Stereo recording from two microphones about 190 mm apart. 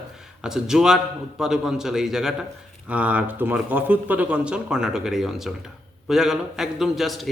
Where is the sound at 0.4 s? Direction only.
5° right (ahead or behind).